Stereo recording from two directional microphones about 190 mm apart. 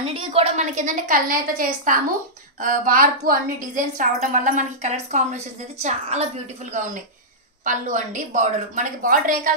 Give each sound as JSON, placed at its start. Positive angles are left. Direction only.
{"t": 0.0, "sound": "a woman's voice", "side_deg": -30}